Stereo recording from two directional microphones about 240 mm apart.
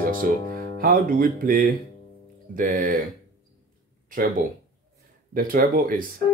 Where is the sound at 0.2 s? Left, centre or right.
Right.